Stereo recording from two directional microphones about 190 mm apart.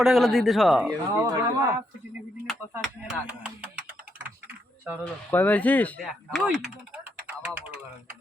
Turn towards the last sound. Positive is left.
turn(degrees=-10)  # may be behind; listen again after turning